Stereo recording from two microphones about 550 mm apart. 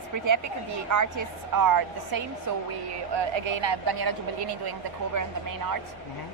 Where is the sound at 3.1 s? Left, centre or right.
Right.